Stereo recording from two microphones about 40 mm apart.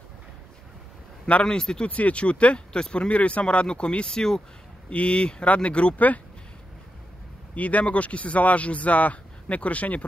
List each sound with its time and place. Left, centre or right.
1.2 s speech: left
1.9 s speech: left
5.9 s speech: left
7.5 s speech: left